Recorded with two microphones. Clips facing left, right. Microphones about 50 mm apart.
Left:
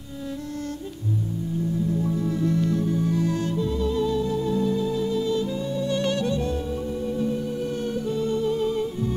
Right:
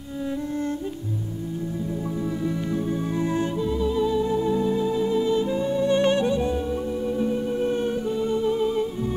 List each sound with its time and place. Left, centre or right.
2.4 s music: centre